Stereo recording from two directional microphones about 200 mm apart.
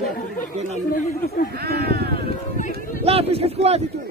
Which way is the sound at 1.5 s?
50° right (ahead or behind).